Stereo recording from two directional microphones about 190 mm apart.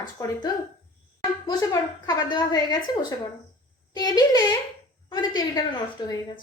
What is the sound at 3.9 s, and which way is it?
A woman's voice, 20° left (ahead or behind).